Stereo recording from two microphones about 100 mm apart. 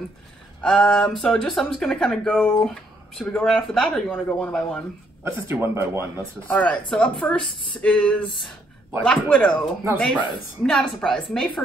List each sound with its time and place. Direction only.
0.6 s speech: 5° left (ahead or behind)
4.1 s speech: 15° left (ahead or behind)
5.2 s speech: 25° right (ahead or behind)
6.4 s speech: 15° left (ahead or behind)
10.6 s speech: 5° left (ahead or behind)